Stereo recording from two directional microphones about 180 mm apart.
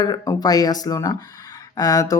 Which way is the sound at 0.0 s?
20° left (ahead or behind).